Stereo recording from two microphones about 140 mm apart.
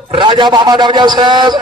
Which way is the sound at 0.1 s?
35° right (ahead or behind).